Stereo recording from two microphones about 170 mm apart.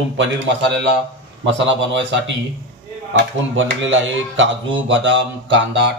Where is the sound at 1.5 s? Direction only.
90° right.